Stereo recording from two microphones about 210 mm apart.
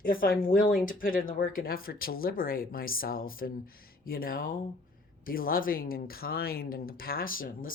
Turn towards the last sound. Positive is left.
turn(degrees=40)  # may be behind; listen again after turning